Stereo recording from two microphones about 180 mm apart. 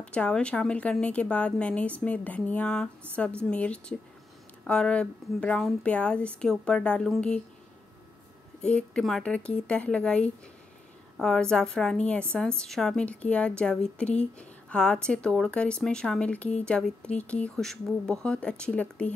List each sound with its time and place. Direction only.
0.0 s a woman's voice: 5° left (ahead or behind)
8.5 s a woman's voice: 5° left (ahead or behind)